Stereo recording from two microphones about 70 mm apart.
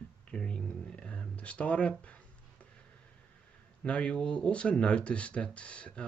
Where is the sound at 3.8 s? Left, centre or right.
Centre.